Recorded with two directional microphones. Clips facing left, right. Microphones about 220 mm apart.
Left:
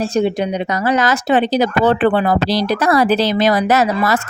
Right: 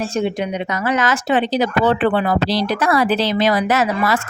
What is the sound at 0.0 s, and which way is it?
Speech, 35° left (ahead or behind).